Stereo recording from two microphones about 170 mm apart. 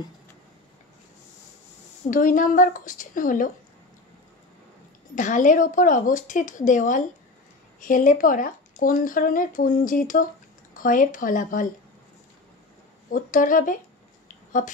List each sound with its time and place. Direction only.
2.0 s speech: 50° left (ahead or behind)
5.1 s speech: 50° left (ahead or behind)
13.1 s speech: 50° left (ahead or behind)
14.2 s a sound: 50° left (ahead or behind)